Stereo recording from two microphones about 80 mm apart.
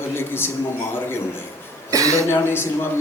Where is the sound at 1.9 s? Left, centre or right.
Right.